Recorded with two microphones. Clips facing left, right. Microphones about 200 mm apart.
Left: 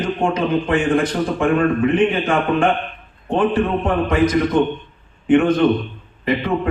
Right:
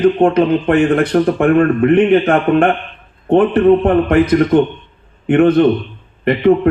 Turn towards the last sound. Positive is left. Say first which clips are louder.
# right 4 dB
turn(degrees=-60)  # may be behind; listen again after turning